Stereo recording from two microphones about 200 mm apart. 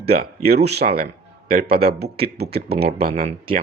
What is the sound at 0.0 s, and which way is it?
Speech, 50° right (ahead or behind).